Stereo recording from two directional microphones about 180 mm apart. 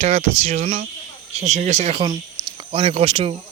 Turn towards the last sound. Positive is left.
turn(degrees=-30)  # may be behind; listen again after turning